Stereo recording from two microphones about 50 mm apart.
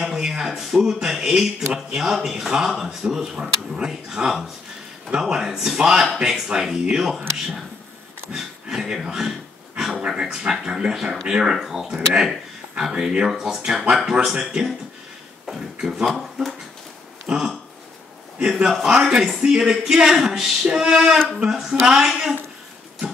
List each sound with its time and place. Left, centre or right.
0.0 s speech: centre
15.8 s speech: centre
17.3 s speech: centre
18.5 s speech: centre
19.4 s speech: centre